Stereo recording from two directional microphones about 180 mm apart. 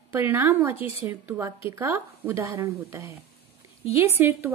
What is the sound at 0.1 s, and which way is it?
A woman's voice, 15° right (ahead or behind).